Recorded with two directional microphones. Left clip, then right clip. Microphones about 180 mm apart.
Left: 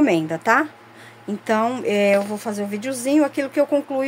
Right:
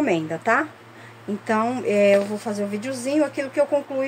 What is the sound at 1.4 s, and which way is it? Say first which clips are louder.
Speech: left 2 dB; 75° left (ahead or behind).